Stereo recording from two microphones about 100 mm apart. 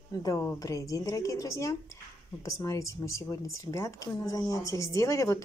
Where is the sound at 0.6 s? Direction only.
35° left (ahead or behind).